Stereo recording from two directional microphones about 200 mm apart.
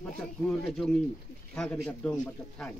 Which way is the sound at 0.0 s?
Centre (ahead or behind).